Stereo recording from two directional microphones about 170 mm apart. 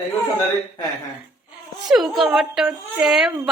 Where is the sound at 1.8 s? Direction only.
Centre (ahead or behind).